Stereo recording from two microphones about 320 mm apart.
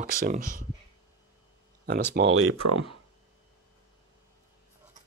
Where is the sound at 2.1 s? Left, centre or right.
Right.